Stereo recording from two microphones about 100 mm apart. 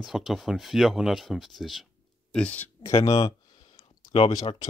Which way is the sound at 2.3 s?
15° left (ahead or behind).